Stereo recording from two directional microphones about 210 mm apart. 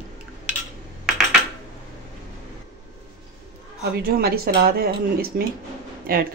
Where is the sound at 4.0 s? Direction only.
45° right (ahead or behind).